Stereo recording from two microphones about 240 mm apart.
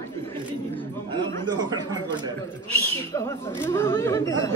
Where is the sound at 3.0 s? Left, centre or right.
Centre.